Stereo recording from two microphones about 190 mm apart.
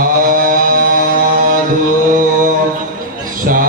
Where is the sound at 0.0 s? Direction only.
45° right (ahead or behind).